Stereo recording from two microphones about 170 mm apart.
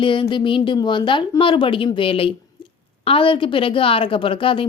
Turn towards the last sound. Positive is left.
turn(degrees=30)  # may be behind; listen again after turning